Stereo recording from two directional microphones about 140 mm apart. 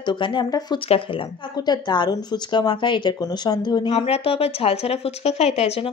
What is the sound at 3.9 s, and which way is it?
Speech, 45° left (ahead or behind).